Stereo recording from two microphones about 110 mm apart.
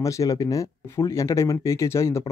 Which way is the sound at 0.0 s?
30° left (ahead or behind).